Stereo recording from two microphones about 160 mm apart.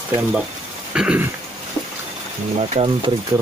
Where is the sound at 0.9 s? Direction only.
5° right (ahead or behind).